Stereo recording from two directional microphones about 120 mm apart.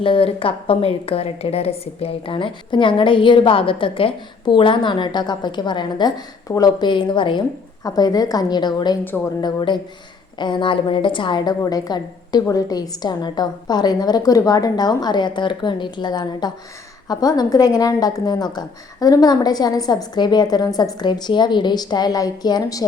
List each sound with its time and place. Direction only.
0.0 s a woman's voice: 50° left (ahead or behind)